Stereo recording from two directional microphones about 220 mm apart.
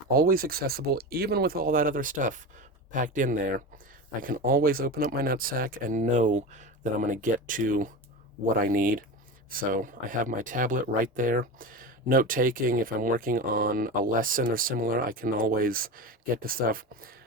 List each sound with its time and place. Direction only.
0.1 s speech: 40° right (ahead or behind)